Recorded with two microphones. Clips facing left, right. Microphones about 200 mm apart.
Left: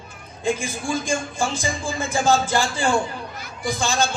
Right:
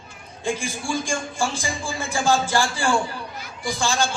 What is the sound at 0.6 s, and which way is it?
A man's voice, 20° left (ahead or behind).